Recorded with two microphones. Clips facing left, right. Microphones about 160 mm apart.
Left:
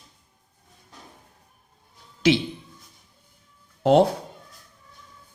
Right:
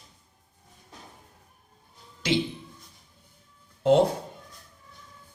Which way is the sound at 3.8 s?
70° left (ahead or behind).